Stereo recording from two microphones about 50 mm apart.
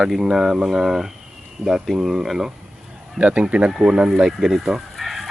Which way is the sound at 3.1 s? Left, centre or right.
Right.